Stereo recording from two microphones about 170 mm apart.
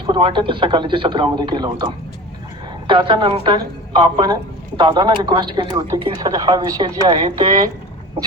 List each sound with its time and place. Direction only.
0.0 s a man's voice: 30° right (ahead or behind)